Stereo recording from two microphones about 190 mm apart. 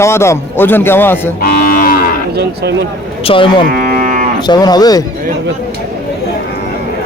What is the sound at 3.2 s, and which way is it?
Speech, 25° left (ahead or behind).